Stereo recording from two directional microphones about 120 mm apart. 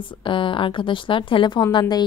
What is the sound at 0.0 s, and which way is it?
A woman's voice, 45° left (ahead or behind).